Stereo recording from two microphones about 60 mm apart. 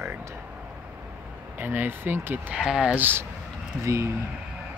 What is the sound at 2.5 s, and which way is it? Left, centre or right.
Speech, centre.